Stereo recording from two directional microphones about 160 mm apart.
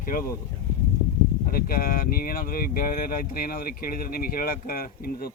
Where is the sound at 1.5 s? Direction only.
65° left (ahead or behind).